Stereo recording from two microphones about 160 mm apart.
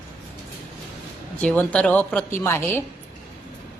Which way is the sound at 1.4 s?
10° left (ahead or behind).